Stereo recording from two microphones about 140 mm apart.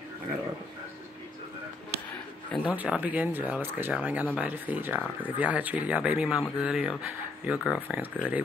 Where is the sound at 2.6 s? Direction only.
10° right (ahead or behind).